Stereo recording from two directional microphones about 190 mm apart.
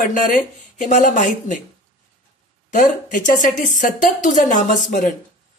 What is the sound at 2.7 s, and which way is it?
Speech, 45° left (ahead or behind).